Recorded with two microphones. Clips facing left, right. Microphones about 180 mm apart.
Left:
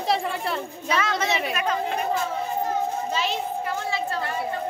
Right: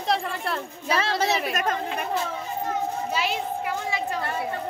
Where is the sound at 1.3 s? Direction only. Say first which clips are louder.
Even; centre (ahead or behind).